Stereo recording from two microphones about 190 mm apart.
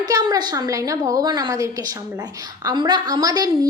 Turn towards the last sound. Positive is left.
turn(degrees=-20)  # may be behind; listen again after turning